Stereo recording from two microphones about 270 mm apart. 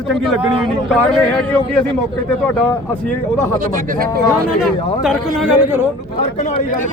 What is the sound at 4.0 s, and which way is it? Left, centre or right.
Speech, right.